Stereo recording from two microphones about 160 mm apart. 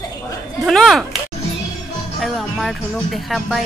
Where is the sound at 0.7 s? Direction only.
Centre (ahead or behind).